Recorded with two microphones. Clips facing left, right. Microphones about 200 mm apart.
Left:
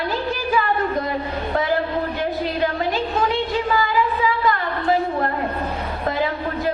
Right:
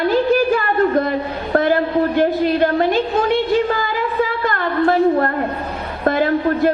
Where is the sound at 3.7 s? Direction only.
50° right (ahead or behind).